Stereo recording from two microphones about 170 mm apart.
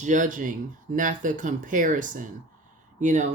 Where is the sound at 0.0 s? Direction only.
45° right (ahead or behind).